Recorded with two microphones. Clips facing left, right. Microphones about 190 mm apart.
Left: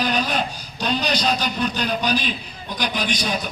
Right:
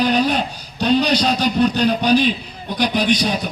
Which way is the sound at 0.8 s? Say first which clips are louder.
Right 7 dB; 65° right (ahead or behind).